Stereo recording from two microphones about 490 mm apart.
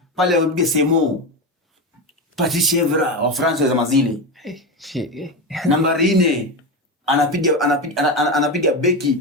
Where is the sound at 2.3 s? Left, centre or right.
Centre.